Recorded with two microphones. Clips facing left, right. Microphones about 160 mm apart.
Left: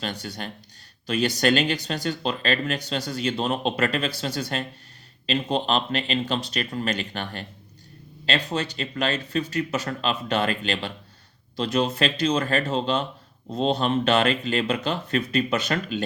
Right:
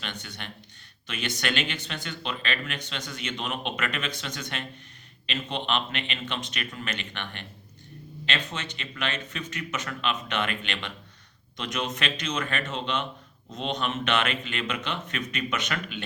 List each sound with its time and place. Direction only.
0.0 s speech: 35° left (ahead or behind)